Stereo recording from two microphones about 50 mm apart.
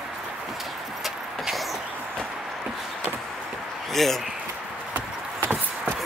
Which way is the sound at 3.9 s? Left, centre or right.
Centre.